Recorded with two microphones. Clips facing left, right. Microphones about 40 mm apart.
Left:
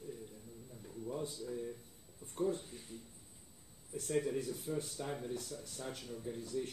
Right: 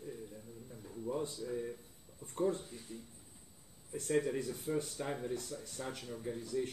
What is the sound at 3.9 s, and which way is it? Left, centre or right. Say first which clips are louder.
A man's voice: right 2 dB; right.